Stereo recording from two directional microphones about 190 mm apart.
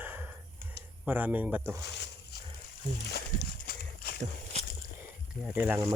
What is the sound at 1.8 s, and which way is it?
Speech, 65° left (ahead or behind).